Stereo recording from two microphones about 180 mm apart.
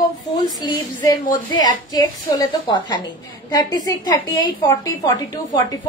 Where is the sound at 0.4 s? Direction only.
25° left (ahead or behind).